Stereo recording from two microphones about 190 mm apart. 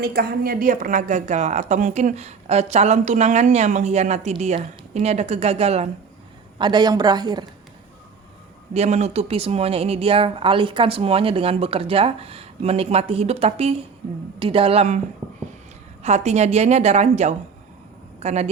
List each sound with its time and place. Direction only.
0.0 s speech: 55° right (ahead or behind); by 5.9 s 35° right (ahead or behind)
6.6 s a woman's voice: 25° right (ahead or behind)
8.7 s speech: 35° right (ahead or behind)
16.0 s speech: 35° right (ahead or behind)